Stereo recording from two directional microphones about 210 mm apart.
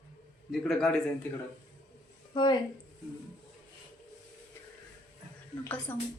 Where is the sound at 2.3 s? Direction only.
20° left (ahead or behind).